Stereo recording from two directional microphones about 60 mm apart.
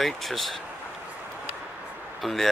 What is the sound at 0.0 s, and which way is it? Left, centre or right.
Speech, centre.